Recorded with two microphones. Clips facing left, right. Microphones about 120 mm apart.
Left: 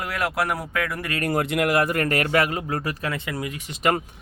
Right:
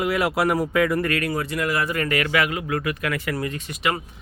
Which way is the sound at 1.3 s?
65° left (ahead or behind).